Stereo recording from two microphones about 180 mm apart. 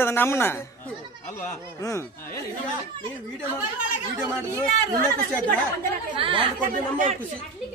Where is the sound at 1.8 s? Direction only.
15° left (ahead or behind).